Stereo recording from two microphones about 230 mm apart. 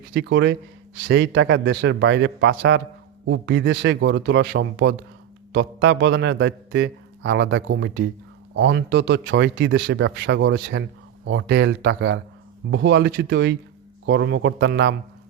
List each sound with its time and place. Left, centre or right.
0.1 s a man's voice: right